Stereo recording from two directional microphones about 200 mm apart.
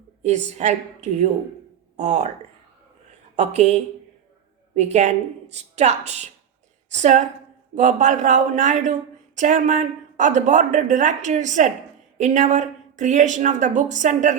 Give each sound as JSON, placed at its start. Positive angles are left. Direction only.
{"t": 0.2, "sound": "speech", "side_deg": -35}
{"t": 3.3, "sound": "speech", "side_deg": -35}